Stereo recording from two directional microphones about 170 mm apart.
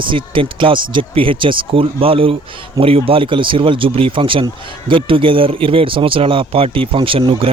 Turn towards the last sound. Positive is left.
turn(degrees=-30)  # may be behind; listen again after turning